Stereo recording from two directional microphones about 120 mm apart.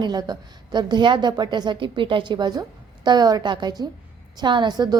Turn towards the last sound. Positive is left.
turn(degrees=-35)  # may be behind; listen again after turning